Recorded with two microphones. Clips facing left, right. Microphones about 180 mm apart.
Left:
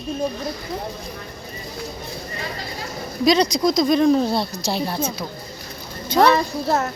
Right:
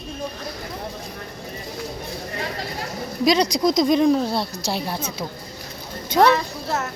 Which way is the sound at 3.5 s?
15° right (ahead or behind).